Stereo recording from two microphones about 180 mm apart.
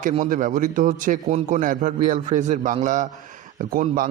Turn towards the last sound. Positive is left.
turn(degrees=-50)  # may be behind; listen again after turning